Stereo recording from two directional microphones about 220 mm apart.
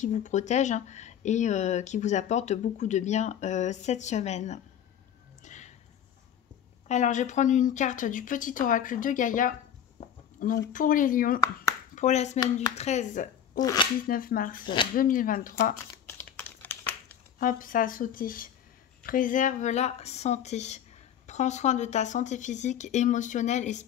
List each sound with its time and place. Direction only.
0.0 s speech: 35° left (ahead or behind)
5.4 s a sound: 35° left (ahead or behind)
6.9 s speech: 35° left (ahead or behind)
13.6 s speech: 15° left (ahead or behind)
14.0 s speech: 40° left (ahead or behind)
16.1 s computer keyboard: 10° left (ahead or behind)
17.4 s speech: 40° left (ahead or behind)